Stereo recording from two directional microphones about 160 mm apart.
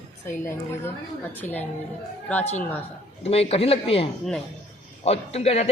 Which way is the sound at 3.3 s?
40° left (ahead or behind).